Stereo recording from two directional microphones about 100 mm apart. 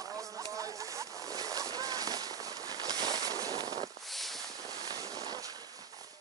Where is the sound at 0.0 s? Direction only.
35° right (ahead or behind).